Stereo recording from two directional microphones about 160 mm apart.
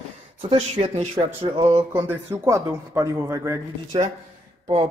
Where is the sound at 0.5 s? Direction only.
40° right (ahead or behind).